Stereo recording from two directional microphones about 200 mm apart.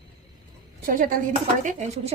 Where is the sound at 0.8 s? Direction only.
45° right (ahead or behind).